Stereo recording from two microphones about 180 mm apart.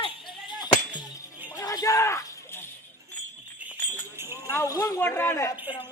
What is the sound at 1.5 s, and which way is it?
Music, 20° left (ahead or behind).